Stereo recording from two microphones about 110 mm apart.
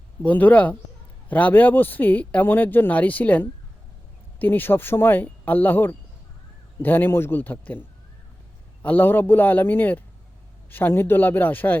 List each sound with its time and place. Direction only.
0.2 s speech: 15° left (ahead or behind)
8.8 s speech: 15° left (ahead or behind)